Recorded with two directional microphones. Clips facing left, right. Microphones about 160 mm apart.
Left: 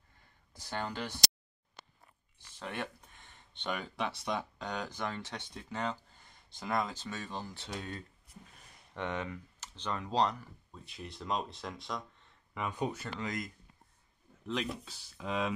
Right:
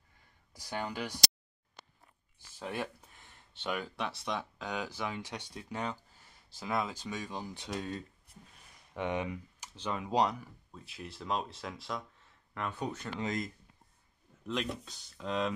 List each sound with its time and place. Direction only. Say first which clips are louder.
0.5 s speech: even; 10° right (ahead or behind)
2.6 s speech: right 2 dB; 10° right (ahead or behind)
12.6 s speech: left 2 dB; 20° left (ahead or behind)
13.2 s speech: right 4 dB; 25° right (ahead or behind)
14.4 s speech: even; centre (ahead or behind)